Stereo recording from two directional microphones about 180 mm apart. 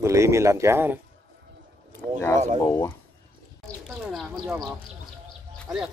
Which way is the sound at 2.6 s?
15° left (ahead or behind).